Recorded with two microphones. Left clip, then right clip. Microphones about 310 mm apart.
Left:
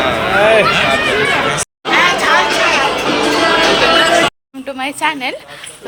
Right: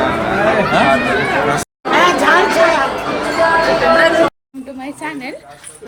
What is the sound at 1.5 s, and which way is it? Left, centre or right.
Chatter, right.